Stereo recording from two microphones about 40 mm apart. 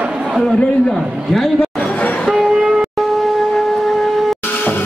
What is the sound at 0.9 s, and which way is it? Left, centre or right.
Speech, centre.